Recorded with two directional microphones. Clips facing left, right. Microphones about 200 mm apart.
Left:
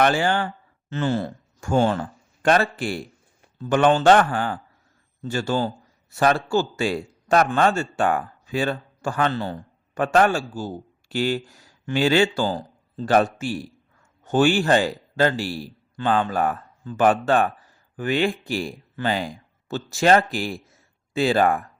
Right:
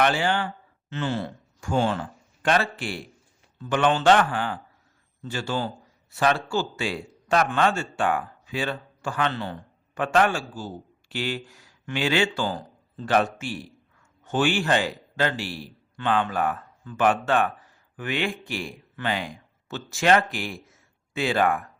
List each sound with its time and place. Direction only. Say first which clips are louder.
0.0 s a man's voice: left 3 dB; 45° left (ahead or behind)